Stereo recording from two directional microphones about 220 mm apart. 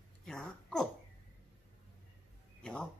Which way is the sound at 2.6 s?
5° left (ahead or behind).